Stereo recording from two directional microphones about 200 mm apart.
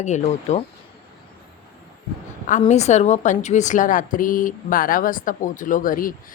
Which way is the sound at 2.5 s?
35° left (ahead or behind).